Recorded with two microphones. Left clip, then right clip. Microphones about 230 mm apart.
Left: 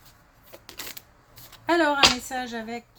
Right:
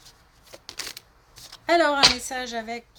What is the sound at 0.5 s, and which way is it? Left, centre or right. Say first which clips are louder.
Shuffling cards: right 1 dB; right.